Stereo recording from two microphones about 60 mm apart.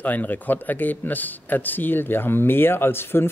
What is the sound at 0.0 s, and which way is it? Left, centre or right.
A man's voice, left.